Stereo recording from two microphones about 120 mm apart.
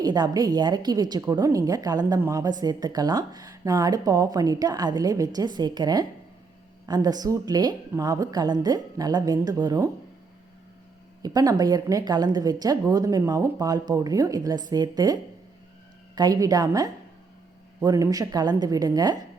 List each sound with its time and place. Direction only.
0.0 s a woman's voice: 35° right (ahead or behind)
11.2 s speech: 30° right (ahead or behind)